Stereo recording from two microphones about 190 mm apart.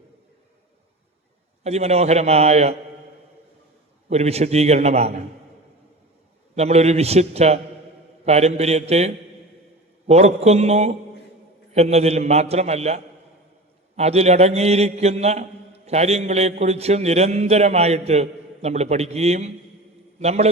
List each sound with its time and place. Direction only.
1.6 s a man's voice: 35° right (ahead or behind)
4.1 s a man's voice: 35° right (ahead or behind)
6.6 s a man's voice: 35° right (ahead or behind)